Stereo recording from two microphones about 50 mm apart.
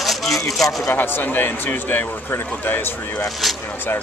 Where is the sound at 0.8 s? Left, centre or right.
Left.